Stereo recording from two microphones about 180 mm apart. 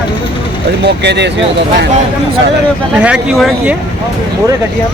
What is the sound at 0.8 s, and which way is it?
Speech, 70° right (ahead or behind).